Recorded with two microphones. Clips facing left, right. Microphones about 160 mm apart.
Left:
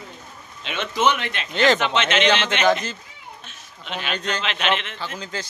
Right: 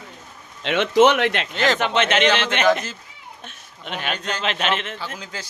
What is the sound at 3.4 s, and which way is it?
Speech, 55° right (ahead or behind).